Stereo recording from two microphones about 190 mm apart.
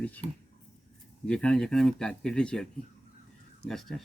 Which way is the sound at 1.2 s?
5° left (ahead or behind).